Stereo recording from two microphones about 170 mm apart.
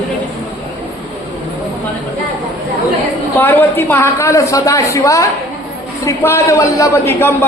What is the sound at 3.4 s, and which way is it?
A man's voice, 15° left (ahead or behind).